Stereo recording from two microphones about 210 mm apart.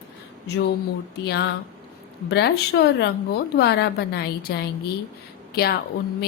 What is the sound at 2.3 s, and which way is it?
A woman's voice, 50° left (ahead or behind).